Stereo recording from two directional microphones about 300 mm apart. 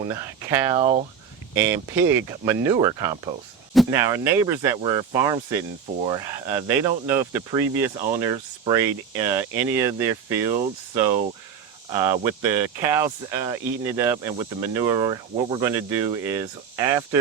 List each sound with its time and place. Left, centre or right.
0.0 s speech: centre